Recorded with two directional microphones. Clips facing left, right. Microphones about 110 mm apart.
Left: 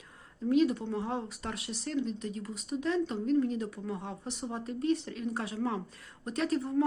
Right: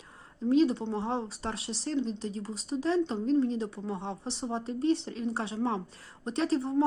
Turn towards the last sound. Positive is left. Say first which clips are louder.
# right 2 dB
turn(degrees=-30)  # may be behind; listen again after turning